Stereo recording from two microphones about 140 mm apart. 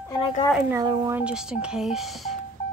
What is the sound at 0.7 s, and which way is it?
Speech, 30° right (ahead or behind).